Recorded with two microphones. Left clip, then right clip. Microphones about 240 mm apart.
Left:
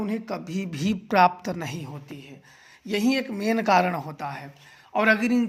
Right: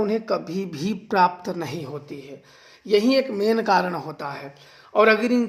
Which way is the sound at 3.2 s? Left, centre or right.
Left.